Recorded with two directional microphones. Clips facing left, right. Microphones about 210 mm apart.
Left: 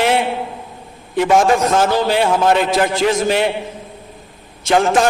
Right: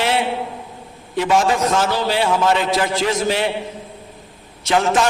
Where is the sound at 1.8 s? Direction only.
50° left (ahead or behind).